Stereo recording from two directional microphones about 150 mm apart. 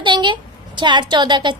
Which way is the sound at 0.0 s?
30° right (ahead or behind).